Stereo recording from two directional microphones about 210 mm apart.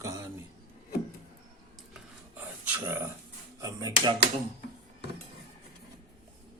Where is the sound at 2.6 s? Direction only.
10° right (ahead or behind).